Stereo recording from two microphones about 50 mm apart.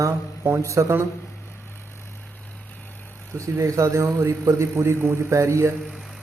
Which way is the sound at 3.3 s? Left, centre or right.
Right.